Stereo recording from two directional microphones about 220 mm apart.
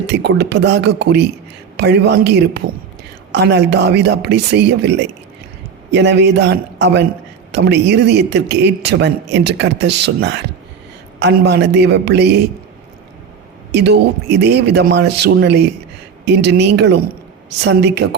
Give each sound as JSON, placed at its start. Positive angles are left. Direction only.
{"t": 0.1, "sound": "a man's voice", "side_deg": -50}
{"t": 13.7, "sound": "a man's voice", "side_deg": -50}